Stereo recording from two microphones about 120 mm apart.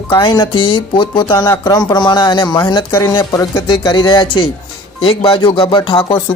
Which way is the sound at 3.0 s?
30° left (ahead or behind).